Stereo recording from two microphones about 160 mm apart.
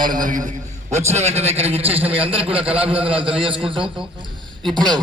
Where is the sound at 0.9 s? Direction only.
45° right (ahead or behind).